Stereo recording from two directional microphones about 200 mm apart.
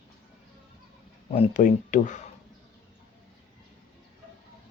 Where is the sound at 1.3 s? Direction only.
35° left (ahead or behind).